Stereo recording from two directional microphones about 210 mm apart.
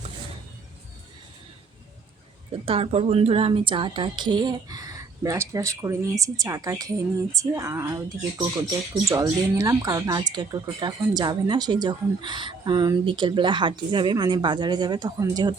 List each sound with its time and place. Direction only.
2.5 s speech: 25° right (ahead or behind)